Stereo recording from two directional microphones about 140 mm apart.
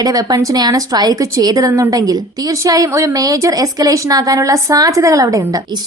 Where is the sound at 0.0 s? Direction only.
25° right (ahead or behind).